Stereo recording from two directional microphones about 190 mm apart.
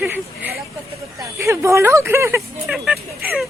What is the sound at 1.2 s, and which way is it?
Speech, 15° right (ahead or behind).